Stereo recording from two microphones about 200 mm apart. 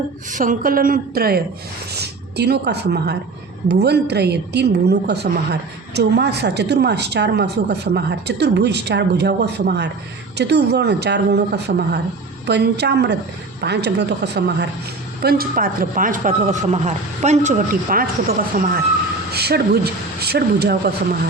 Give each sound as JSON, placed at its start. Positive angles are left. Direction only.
{"t": 0.3, "sound": "a woman's voice", "side_deg": -40}